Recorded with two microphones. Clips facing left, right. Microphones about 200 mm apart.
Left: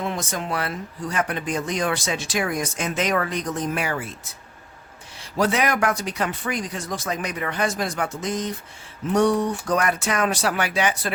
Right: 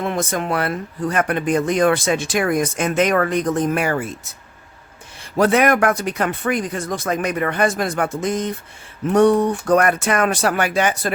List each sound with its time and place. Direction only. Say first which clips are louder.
0.0 s speech: right 5 dB; 60° right (ahead or behind)
5.4 s speech: right 6 dB; 55° right (ahead or behind)